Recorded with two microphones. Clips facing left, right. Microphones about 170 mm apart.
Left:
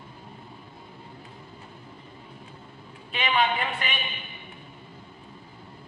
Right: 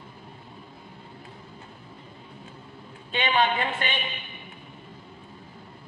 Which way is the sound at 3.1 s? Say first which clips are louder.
Right 1 dB; 30° right (ahead or behind).